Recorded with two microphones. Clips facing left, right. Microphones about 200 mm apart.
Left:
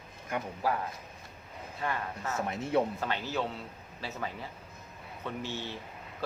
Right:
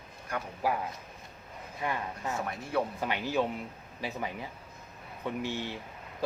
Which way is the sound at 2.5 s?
25° left (ahead or behind).